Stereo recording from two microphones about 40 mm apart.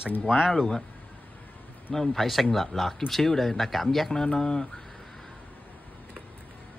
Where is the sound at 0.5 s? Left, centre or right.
Centre.